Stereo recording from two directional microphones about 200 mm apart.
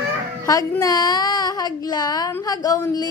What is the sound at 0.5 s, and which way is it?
Speech, 20° left (ahead or behind).